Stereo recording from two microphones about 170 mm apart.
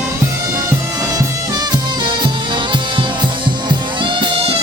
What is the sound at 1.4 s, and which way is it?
Music, 25° right (ahead or behind).